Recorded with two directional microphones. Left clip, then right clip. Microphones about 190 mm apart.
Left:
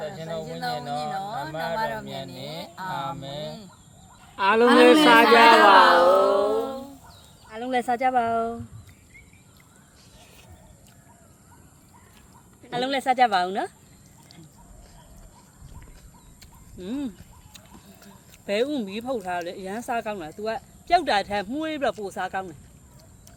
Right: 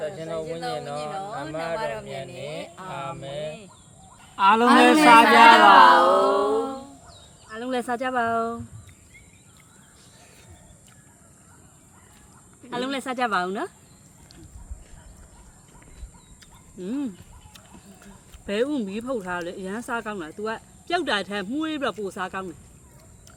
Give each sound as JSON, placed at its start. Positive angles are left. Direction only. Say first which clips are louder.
{"t": 0.0, "sound": "speech", "louder": "right 2 dB", "side_deg": 0}
{"t": 4.4, "sound": "speech", "louder": "right 1 dB", "side_deg": -20}
{"t": 5.2, "sound": "speech", "louder": "right 1 dB", "side_deg": -10}
{"t": 12.7, "sound": "speech", "louder": "left 5 dB", "side_deg": -10}
{"t": 16.7, "sound": "speech", "louder": "right 2 dB", "side_deg": 0}